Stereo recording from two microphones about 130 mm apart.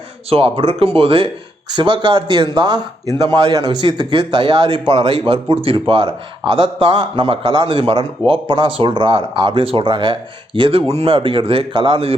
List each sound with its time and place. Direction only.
0.3 s a man's voice: 45° right (ahead or behind)